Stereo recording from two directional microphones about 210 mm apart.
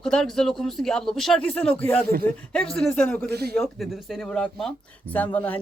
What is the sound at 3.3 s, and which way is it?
Speech, 50° right (ahead or behind).